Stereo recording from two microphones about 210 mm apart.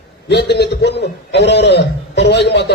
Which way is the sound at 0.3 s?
55° left (ahead or behind).